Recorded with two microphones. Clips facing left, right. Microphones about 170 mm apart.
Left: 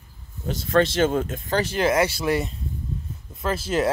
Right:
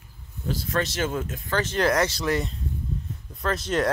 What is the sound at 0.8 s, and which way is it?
Speech, 30° left (ahead or behind).